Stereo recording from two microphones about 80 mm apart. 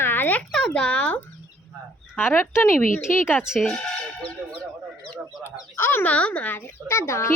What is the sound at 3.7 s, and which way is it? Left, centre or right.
Speech, centre.